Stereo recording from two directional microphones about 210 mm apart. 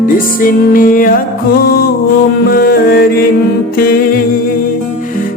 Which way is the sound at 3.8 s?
45° left (ahead or behind).